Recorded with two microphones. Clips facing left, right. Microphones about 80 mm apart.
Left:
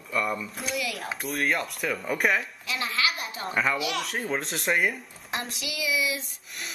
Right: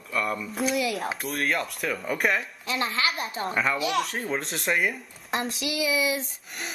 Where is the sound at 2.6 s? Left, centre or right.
Right.